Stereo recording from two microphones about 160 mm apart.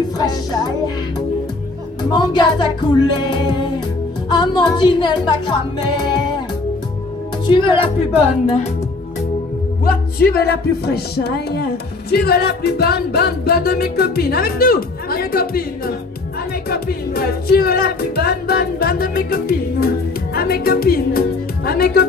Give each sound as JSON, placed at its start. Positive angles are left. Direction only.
{"t": 0.2, "sound": "music", "side_deg": 25}
{"t": 2.0, "sound": "music", "side_deg": 25}
{"t": 7.4, "sound": "speech", "side_deg": 30}
{"t": 9.8, "sound": "music", "side_deg": 70}
{"t": 16.6, "sound": "music", "side_deg": 75}